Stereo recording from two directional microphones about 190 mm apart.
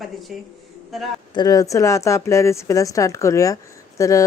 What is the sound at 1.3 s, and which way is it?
A woman's voice, 20° left (ahead or behind).